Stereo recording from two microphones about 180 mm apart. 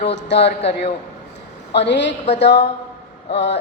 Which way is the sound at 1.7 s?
75° left (ahead or behind).